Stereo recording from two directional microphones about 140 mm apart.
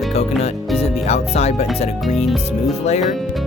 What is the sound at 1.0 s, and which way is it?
Speech, 50° left (ahead or behind).